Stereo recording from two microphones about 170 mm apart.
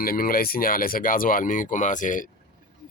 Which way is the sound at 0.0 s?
55° left (ahead or behind).